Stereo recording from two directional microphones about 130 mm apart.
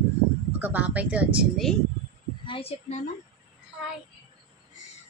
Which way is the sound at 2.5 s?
50° left (ahead or behind).